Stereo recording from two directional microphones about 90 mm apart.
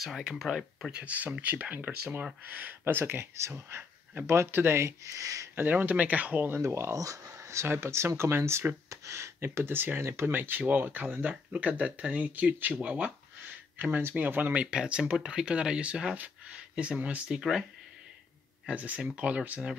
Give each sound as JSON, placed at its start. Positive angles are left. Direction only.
{"t": 0.0, "sound": "speech", "side_deg": -5}
{"t": 0.9, "sound": "speech", "side_deg": -15}
{"t": 5.6, "sound": "speech", "side_deg": -20}
{"t": 17.4, "sound": "speech", "side_deg": -5}
{"t": 18.7, "sound": "speech", "side_deg": -15}